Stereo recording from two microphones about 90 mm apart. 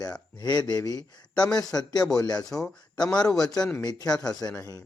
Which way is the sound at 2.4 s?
5° left (ahead or behind).